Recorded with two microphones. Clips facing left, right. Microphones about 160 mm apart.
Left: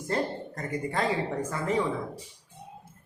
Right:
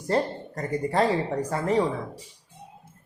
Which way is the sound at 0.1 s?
35° right (ahead or behind).